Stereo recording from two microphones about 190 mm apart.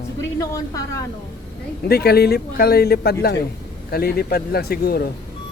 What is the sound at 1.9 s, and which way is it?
A man's voice, 55° left (ahead or behind).